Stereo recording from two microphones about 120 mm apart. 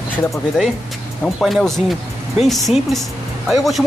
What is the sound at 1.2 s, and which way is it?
Speech, centre (ahead or behind).